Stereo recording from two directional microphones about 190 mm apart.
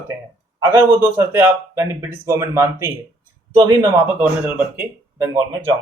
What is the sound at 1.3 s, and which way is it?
Speech, 15° right (ahead or behind).